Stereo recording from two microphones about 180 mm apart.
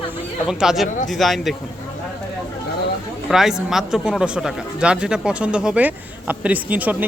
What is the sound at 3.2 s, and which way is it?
Speech, centre (ahead or behind).